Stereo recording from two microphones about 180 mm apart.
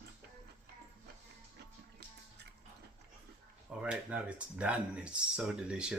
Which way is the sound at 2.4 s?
65° right (ahead or behind).